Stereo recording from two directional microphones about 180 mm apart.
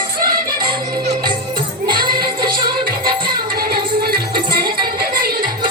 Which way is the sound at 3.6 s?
55° right (ahead or behind).